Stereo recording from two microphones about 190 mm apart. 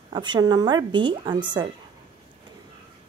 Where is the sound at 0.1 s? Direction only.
25° right (ahead or behind).